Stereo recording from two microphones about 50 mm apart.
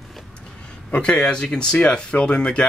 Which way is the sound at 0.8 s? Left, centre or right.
Left.